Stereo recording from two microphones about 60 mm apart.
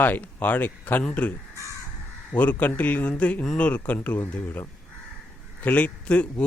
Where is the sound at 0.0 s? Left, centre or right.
Left.